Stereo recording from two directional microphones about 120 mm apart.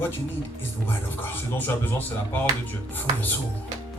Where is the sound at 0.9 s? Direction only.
20° left (ahead or behind).